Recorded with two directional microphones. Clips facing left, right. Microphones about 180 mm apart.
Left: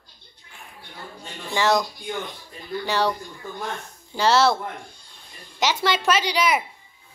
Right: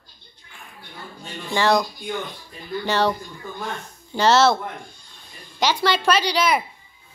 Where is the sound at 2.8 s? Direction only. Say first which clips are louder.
Right 2 dB; 10° left (ahead or behind).